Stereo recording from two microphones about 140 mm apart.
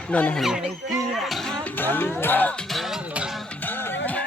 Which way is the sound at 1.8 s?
15° left (ahead or behind).